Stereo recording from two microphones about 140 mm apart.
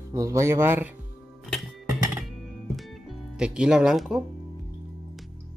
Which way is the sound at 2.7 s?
Centre (ahead or behind).